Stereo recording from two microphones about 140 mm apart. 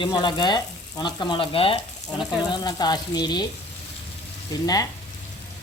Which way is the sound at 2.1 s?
30° left (ahead or behind).